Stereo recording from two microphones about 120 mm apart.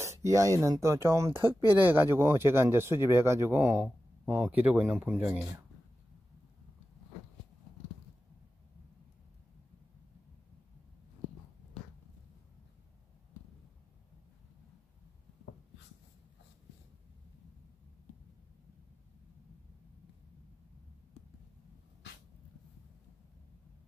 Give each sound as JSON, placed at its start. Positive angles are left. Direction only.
{"t": 0.2, "sound": "speech", "side_deg": -25}